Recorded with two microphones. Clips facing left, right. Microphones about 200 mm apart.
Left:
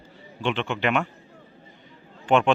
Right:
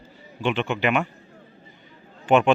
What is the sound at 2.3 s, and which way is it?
Speech, 5° right (ahead or behind).